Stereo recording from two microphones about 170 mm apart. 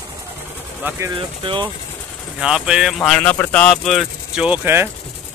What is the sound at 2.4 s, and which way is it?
Speech, 5° right (ahead or behind).